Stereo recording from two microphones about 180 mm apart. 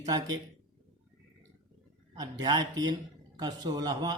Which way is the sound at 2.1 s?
20° right (ahead or behind).